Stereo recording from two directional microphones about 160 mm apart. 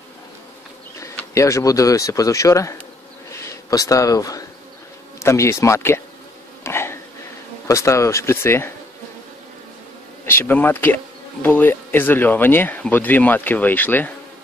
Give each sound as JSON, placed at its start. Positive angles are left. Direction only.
{"t": 0.9, "sound": "speech", "side_deg": 20}
{"t": 6.6, "sound": "a sound", "side_deg": 15}
{"t": 7.6, "sound": "speech", "side_deg": 20}
{"t": 10.2, "sound": "speech", "side_deg": 15}